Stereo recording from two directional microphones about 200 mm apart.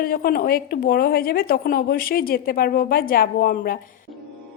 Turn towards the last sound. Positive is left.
turn(degrees=45)  # may be behind; listen again after turning